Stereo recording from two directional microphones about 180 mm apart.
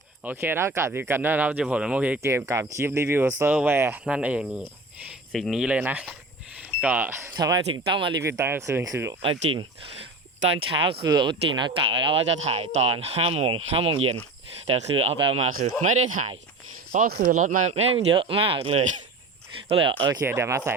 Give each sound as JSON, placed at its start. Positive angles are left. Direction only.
{"t": 0.3, "sound": "speech", "side_deg": -10}
{"t": 8.2, "sound": "speech", "side_deg": -15}
{"t": 9.2, "sound": "speech", "side_deg": -30}
{"t": 17.3, "sound": "speech", "side_deg": -40}
{"t": 20.2, "sound": "speech", "side_deg": -15}